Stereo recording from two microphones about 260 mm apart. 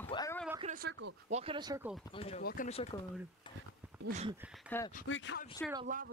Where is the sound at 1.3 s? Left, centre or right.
Right.